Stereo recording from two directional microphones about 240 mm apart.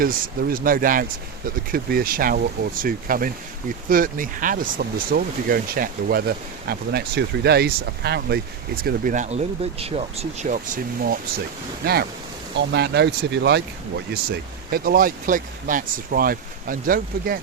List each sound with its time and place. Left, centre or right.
0.0 s speech: right
14.7 s speech: right